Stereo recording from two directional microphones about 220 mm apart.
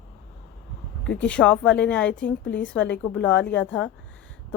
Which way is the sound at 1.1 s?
5° left (ahead or behind).